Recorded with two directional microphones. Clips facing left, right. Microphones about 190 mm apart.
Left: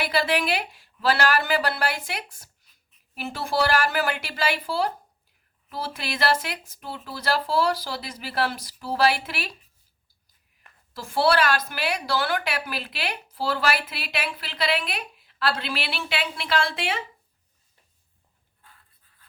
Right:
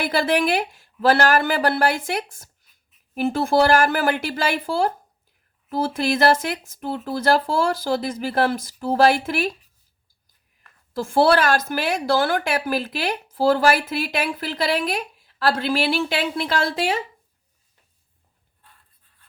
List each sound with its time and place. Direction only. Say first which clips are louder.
0.0 s a woman's voice: right 4 dB; 50° right (ahead or behind)
10.9 s a woman's voice: right 5 dB; 50° right (ahead or behind)